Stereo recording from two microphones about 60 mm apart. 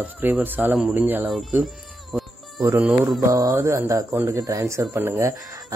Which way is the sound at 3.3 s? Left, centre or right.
Right.